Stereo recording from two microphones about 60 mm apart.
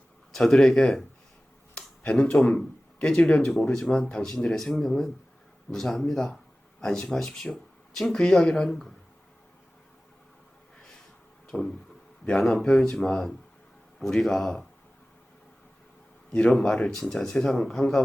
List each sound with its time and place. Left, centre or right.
0.3 s speech: centre
2.4 s speech: centre
3.0 s speech: centre
6.1 s a sound: centre
7.1 s speech: centre
11.5 s a sound: left
12.4 s speech: centre
16.7 s speech: centre